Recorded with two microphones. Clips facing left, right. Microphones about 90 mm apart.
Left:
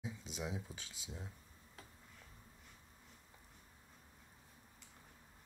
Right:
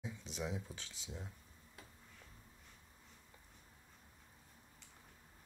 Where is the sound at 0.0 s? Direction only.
15° left (ahead or behind).